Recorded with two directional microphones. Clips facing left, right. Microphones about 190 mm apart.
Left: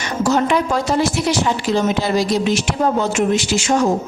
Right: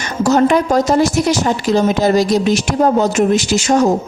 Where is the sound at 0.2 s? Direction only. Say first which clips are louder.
Right 5 dB; 40° right (ahead or behind).